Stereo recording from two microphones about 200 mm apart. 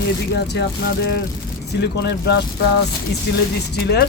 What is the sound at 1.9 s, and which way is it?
Speech, 55° left (ahead or behind).